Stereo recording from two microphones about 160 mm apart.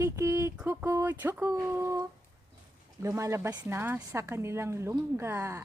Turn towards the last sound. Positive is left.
turn(degrees=-15)  # may be behind; listen again after turning